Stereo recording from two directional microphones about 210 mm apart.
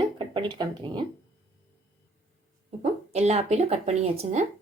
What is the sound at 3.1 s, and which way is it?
A woman's voice, 30° right (ahead or behind).